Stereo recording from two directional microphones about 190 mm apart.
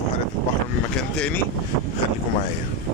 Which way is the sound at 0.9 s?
5° left (ahead or behind).